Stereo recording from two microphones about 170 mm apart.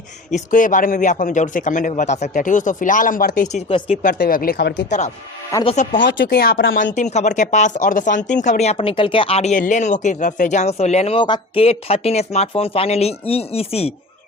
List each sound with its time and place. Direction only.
0.3 s speech: 45° left (ahead or behind)
3.7 s speech: 35° left (ahead or behind)
4.0 s speech: 55° left (ahead or behind); by 4.9 s 70° left (ahead or behind)
4.9 s speech: 45° left (ahead or behind)
6.1 s speech: 75° left (ahead or behind)
6.9 s speech: 45° left (ahead or behind)